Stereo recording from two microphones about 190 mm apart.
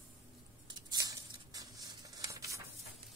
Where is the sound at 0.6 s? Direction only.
20° right (ahead or behind).